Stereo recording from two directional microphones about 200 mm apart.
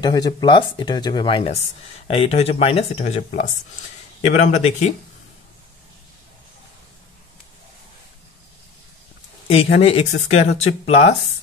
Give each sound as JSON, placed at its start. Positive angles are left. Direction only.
{"t": 0.0, "sound": "speech", "side_deg": 20}
{"t": 9.5, "sound": "speech", "side_deg": 30}